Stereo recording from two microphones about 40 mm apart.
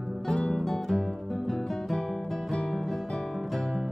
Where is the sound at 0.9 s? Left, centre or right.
Centre.